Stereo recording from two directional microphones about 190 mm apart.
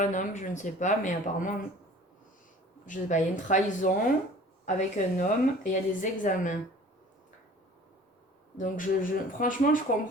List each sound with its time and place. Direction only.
0.0 s speech: 40° left (ahead or behind)
2.8 s a woman's voice: 40° left (ahead or behind)
8.5 s a woman's voice: 45° left (ahead or behind)